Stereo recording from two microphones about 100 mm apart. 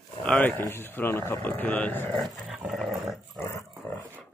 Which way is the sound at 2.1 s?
5° right (ahead or behind).